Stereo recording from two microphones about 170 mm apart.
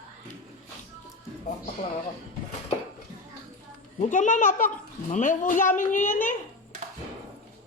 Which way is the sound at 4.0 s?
50° left (ahead or behind).